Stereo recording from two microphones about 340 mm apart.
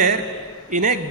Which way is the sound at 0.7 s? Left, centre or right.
Right.